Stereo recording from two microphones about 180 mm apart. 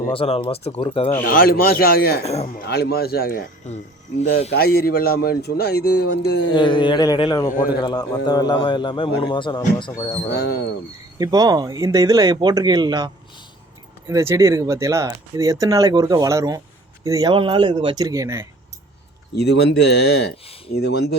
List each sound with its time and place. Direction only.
0.1 s speech: 30° left (ahead or behind)
1.2 s a man's voice: 55° left (ahead or behind)
2.2 s speech: 35° left (ahead or behind)
2.6 s a man's voice: 60° left (ahead or behind)
3.6 s speech: 40° left (ahead or behind)
4.5 s a man's voice: 60° left (ahead or behind)
6.5 s a man's voice: 25° left (ahead or behind)
10.2 s a man's voice: 65° left (ahead or behind)
11.2 s speech: 20° right (ahead or behind)
14.1 s speech: 15° right (ahead or behind)
19.4 s a man's voice: 70° left (ahead or behind)